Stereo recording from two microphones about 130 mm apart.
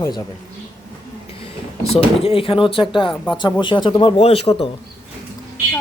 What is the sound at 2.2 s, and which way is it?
Speech, 45° left (ahead or behind).